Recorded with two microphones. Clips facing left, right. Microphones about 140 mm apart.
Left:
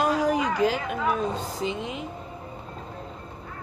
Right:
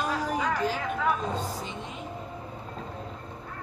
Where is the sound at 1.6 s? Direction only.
90° left.